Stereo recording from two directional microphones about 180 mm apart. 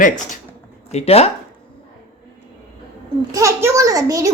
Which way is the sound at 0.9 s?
35° left (ahead or behind).